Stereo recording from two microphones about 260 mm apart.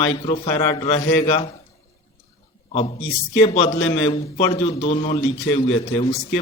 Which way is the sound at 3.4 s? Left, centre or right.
Left.